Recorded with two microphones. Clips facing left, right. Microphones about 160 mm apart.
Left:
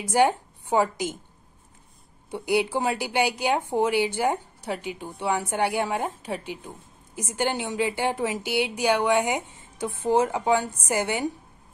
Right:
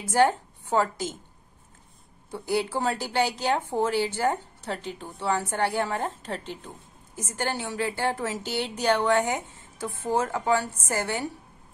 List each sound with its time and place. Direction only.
0.0 s speech: 15° left (ahead or behind)
2.3 s a woman's voice: 15° left (ahead or behind)